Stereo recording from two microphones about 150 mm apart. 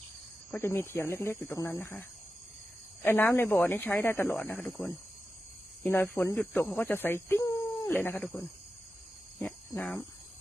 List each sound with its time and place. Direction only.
0.5 s speech: 15° left (ahead or behind)
7.9 s speech: 10° left (ahead or behind)
9.4 s speech: 10° left (ahead or behind)